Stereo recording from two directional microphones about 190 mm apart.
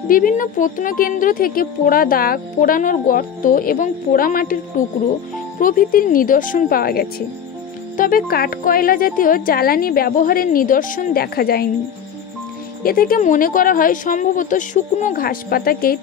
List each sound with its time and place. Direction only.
0.1 s speech: 45° left (ahead or behind)
12.8 s speech: 50° left (ahead or behind)